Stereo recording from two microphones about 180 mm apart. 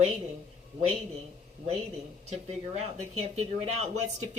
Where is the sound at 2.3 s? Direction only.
35° right (ahead or behind).